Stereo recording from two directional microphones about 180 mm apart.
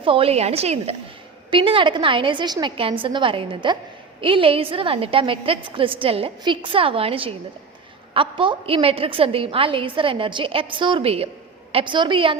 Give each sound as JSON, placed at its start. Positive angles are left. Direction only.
{"t": 0.0, "sound": "a woman's voice", "side_deg": -30}